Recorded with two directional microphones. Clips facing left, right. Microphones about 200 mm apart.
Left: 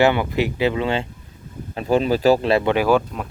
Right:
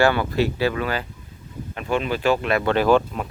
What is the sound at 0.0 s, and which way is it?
Speech, 20° left (ahead or behind).